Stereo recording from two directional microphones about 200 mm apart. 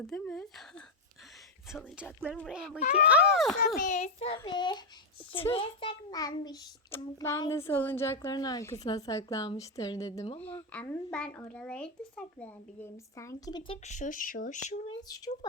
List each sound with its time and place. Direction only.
0.1 s speech: 5° left (ahead or behind)
2.5 s speech: 5° right (ahead or behind)
3.8 s speech: 35° left (ahead or behind)
4.4 s a child's voice: 20° left (ahead or behind)
13.8 s speech: 40° left (ahead or behind)
15.0 s speech: 20° left (ahead or behind)